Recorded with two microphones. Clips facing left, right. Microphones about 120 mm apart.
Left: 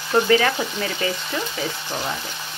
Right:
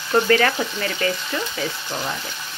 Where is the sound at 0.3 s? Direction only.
15° left (ahead or behind).